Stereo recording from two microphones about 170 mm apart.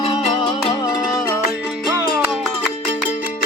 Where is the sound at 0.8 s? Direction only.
20° left (ahead or behind).